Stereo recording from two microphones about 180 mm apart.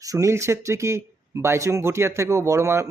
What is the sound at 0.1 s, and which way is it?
A man's voice, 15° right (ahead or behind).